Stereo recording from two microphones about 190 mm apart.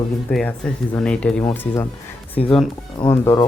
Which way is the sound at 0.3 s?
5° left (ahead or behind).